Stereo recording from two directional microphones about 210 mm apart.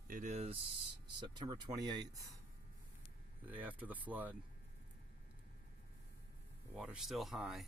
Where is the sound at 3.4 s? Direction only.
10° right (ahead or behind).